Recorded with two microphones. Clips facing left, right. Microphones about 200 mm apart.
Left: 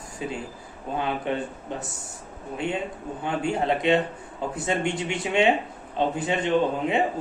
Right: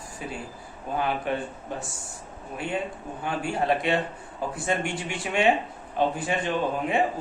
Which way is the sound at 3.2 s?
20° left (ahead or behind).